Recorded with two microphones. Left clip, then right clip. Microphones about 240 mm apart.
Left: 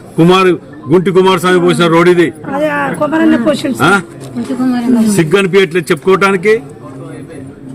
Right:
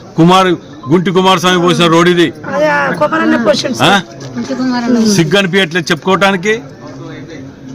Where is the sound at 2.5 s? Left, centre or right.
Right.